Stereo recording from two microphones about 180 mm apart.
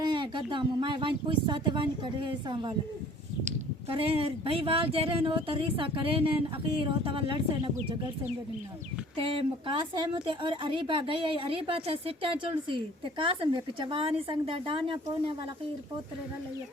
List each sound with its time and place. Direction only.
0.0 s a woman's voice: 25° right (ahead or behind)
9.1 s a woman's voice: 30° right (ahead or behind)